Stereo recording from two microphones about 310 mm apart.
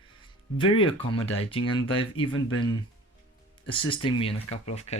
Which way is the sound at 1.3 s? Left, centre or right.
Centre.